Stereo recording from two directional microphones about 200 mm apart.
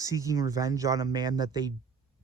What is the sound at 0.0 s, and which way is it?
Speech, 15° right (ahead or behind).